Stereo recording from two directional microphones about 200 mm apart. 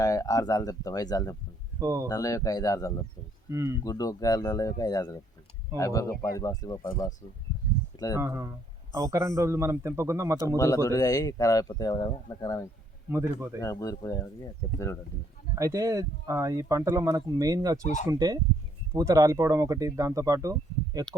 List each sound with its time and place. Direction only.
0.0 s speech: 15° left (ahead or behind)
1.8 s speech: 15° right (ahead or behind)
2.0 s speech: 20° left (ahead or behind)
3.5 s speech: 15° right (ahead or behind)
3.8 s speech: 20° left (ahead or behind)
7.9 s speech: 15° left (ahead or behind)
8.2 s speech: 15° right (ahead or behind)
10.8 s speech: 15° left (ahead or behind)
13.1 s speech: 10° right (ahead or behind)
13.6 s speech: 15° left (ahead or behind)
15.5 s speech: 15° right (ahead or behind)